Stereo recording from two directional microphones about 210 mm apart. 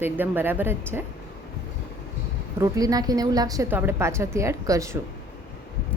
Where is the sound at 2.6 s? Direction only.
15° right (ahead or behind).